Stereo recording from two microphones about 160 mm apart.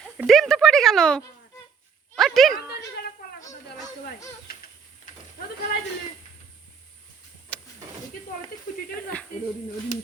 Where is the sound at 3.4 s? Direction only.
20° left (ahead or behind).